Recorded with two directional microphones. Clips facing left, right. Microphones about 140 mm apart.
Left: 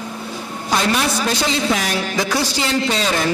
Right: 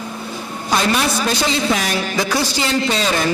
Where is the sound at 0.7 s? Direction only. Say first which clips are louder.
Right 1 dB; 10° right (ahead or behind).